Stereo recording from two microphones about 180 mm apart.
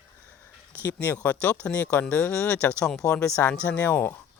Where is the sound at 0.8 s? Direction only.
10° left (ahead or behind).